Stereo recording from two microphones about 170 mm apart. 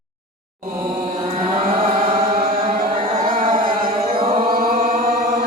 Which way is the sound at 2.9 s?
30° right (ahead or behind).